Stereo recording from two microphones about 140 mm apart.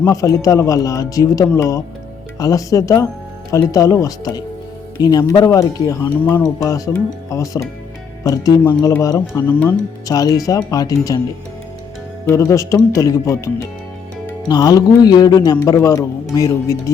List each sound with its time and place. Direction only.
0.0 s speech: 20° left (ahead or behind)
12.3 s speech: 20° left (ahead or behind)